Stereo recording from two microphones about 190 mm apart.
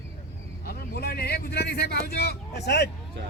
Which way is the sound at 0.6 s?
55° left (ahead or behind).